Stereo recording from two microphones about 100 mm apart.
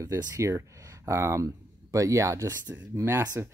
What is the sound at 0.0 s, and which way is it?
Speech, 30° right (ahead or behind).